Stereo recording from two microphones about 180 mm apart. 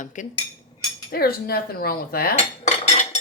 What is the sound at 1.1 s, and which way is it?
Cutlery, 55° left (ahead or behind).